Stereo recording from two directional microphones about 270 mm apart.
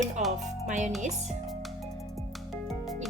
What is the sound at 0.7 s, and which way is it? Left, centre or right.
Speech, right.